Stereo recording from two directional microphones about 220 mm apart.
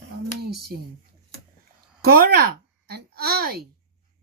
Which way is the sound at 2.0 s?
45° right (ahead or behind).